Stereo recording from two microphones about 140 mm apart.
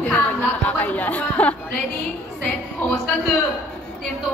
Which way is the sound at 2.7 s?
10° left (ahead or behind).